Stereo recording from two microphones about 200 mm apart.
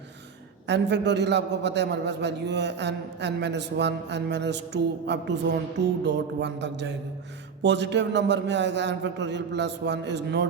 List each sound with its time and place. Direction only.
0.7 s a man's voice: 60° right (ahead or behind)